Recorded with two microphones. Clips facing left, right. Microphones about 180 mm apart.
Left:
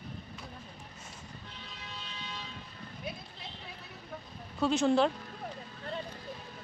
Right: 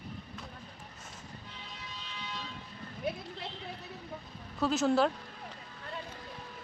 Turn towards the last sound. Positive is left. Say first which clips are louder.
# left 1 dB
turn(degrees=-5)  # may be behind; listen again after turning